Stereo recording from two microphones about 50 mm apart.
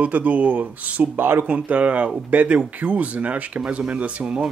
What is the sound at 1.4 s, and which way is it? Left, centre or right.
Speech, right.